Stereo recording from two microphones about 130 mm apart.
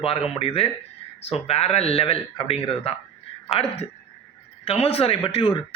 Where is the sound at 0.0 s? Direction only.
45° left (ahead or behind).